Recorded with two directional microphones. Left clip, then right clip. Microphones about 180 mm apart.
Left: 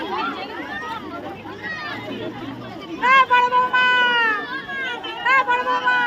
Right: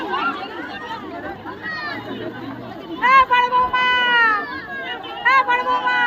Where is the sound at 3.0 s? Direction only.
70° left (ahead or behind).